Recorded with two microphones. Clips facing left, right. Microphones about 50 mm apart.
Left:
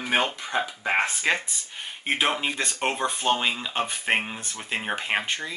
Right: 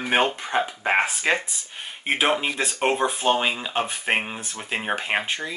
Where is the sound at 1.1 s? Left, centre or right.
Centre.